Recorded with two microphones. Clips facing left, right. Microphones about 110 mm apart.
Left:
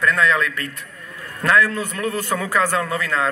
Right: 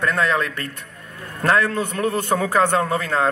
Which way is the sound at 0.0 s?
35° right (ahead or behind).